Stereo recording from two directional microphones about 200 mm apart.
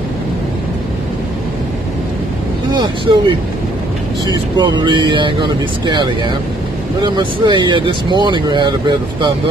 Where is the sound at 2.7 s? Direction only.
25° right (ahead or behind).